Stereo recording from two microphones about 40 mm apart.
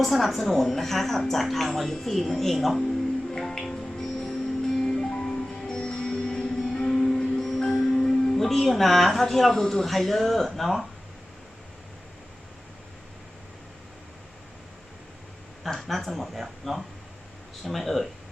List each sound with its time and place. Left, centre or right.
0.0 s speech: centre
3.3 s music: centre
7.9 s speech: centre
15.7 s speech: centre